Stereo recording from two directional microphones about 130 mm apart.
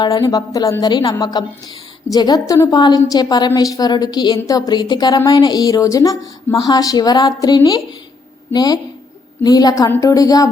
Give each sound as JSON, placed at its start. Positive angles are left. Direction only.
{"t": 0.0, "sound": "a woman's voice", "side_deg": 30}